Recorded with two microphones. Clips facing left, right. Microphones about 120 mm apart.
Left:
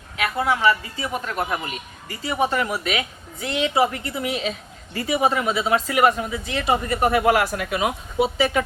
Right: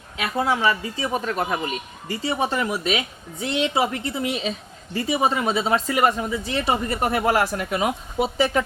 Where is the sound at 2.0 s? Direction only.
30° right (ahead or behind).